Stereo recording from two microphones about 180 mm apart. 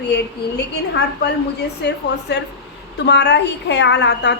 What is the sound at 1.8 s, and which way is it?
A woman's voice, 70° left (ahead or behind).